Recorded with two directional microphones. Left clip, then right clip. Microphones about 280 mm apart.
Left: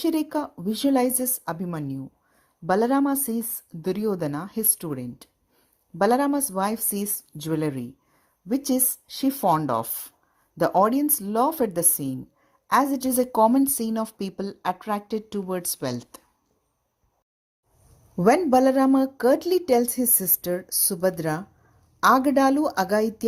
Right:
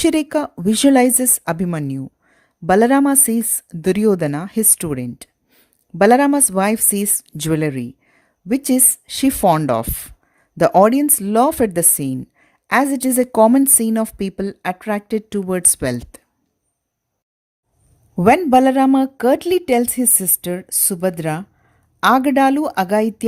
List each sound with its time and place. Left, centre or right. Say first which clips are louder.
0.0 s a woman's voice: right 8 dB; right
7.2 s speech: right 9 dB; right
7.5 s a woman's voice: right 7 dB; right
18.3 s a woman's voice: right 6 dB; right